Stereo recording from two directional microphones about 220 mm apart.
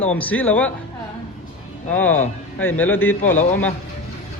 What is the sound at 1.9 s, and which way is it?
A man's voice, 10° left (ahead or behind).